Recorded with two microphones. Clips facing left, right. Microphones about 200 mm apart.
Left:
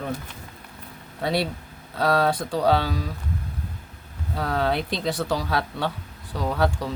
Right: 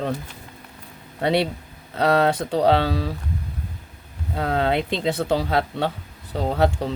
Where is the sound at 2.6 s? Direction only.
65° right (ahead or behind).